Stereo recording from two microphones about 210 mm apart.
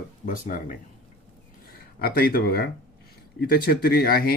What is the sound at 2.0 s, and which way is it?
Speech, 45° left (ahead or behind).